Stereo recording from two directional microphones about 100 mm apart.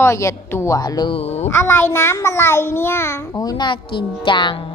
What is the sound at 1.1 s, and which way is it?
Speech, 90° left.